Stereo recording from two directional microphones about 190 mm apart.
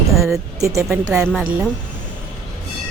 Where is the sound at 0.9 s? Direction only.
5° right (ahead or behind).